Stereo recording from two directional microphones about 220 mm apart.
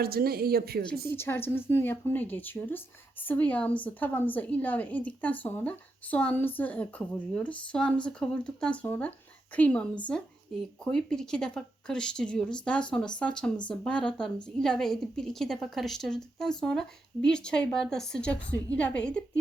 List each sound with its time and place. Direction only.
0.0 s speech: 45° right (ahead or behind)
1.1 s a woman's voice: 10° left (ahead or behind)